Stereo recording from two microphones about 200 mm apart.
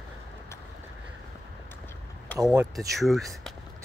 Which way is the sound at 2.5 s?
10° right (ahead or behind).